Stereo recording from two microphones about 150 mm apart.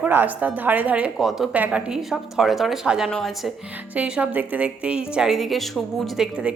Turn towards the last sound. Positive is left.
turn(degrees=-5)  # may be behind; listen again after turning